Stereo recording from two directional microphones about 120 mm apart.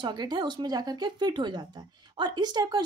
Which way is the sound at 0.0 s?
35° right (ahead or behind).